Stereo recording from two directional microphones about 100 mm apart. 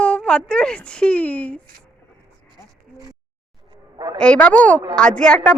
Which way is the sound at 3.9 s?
45° right (ahead or behind).